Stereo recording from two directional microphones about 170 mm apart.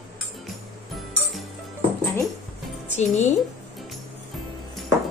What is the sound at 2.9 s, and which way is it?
Speech, 40° left (ahead or behind).